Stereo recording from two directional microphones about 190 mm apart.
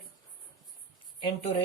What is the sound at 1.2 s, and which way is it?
Speech, 30° left (ahead or behind).